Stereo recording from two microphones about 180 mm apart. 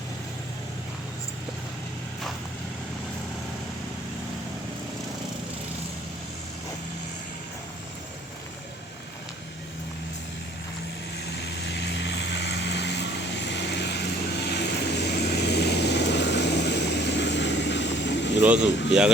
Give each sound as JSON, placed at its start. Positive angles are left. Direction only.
{"t": 11.3, "sound": "vehicle", "side_deg": 70}
{"t": 18.4, "sound": "speech", "side_deg": -5}